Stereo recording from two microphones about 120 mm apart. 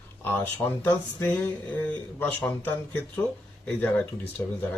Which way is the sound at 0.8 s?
15° left (ahead or behind).